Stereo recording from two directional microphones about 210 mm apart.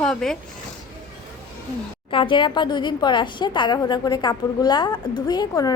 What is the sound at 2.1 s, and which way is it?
A woman's voice, 25° left (ahead or behind).